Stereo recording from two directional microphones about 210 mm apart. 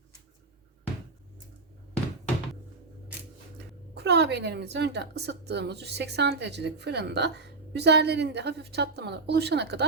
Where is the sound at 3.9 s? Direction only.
55° right (ahead or behind).